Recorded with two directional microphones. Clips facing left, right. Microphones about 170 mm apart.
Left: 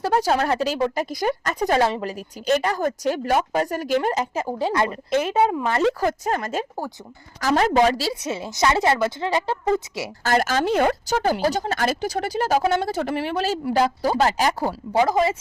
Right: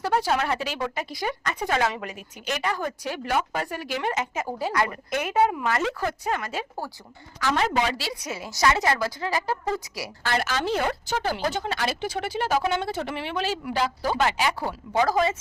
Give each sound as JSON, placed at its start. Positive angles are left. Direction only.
{"t": 0.0, "sound": "a woman's voice", "side_deg": 40}
{"t": 4.4, "sound": "a woman's voice", "side_deg": 25}
{"t": 8.1, "sound": "speech", "side_deg": 25}
{"t": 10.2, "sound": "a woman's voice", "side_deg": 45}
{"t": 14.9, "sound": "speech", "side_deg": 20}